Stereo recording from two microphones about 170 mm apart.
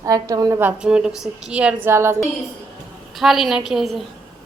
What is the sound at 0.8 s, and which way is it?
Speech, 5° right (ahead or behind).